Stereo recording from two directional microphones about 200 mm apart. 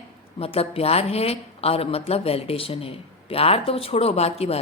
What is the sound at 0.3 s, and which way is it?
A woman's voice, 30° left (ahead or behind).